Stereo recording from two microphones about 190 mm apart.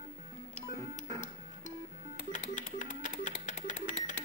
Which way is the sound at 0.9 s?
40° left (ahead or behind).